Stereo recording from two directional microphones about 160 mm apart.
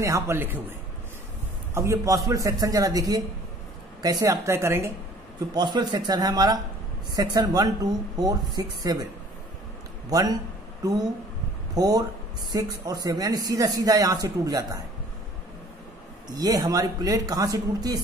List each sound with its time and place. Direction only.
0.0 s a woman's voice: 20° right (ahead or behind)
1.7 s a woman's voice: 20° right (ahead or behind)
5.5 s speech: 25° right (ahead or behind)
10.0 s a man's voice: 25° right (ahead or behind)
11.7 s speech: 25° right (ahead or behind)
16.3 s speech: 25° right (ahead or behind)